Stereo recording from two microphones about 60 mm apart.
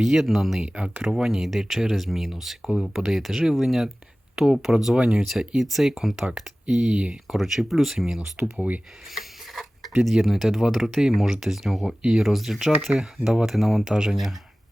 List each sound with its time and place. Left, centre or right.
0.0 s speech: centre
4.9 s speech: centre
5.2 s speech: centre
6.2 s speech: centre
7.3 s speech: centre; by 8.8 s right
9.1 s a sound: centre
10.0 s speech: centre